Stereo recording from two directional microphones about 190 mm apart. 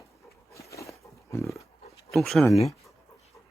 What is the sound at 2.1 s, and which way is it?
Speech, centre (ahead or behind).